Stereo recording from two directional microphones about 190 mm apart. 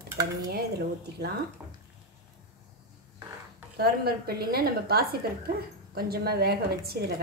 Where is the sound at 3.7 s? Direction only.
55° right (ahead or behind).